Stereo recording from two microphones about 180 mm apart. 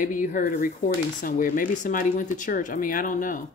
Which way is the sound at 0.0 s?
45° left (ahead or behind).